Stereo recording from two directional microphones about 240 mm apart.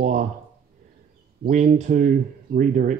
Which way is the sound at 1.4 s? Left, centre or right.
Right.